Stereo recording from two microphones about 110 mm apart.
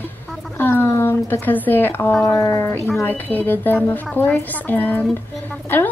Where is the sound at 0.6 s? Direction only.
20° left (ahead or behind).